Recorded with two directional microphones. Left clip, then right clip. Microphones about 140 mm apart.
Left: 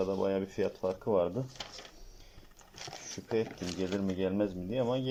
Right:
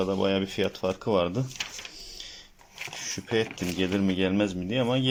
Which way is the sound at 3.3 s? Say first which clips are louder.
Right 5 dB; 15° right (ahead or behind).